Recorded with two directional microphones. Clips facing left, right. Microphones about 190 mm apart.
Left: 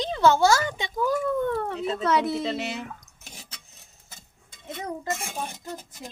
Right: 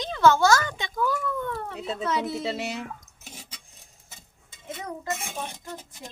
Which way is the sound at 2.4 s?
10° right (ahead or behind).